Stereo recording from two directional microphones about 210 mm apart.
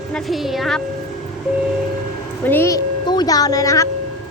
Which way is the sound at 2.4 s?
10° left (ahead or behind).